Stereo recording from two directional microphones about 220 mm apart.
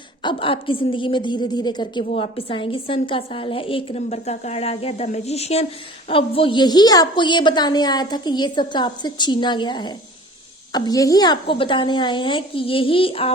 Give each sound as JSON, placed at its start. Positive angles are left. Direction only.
{"t": 0.2, "sound": "a woman's voice", "side_deg": 20}